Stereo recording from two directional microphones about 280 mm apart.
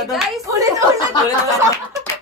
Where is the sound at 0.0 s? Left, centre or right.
Centre.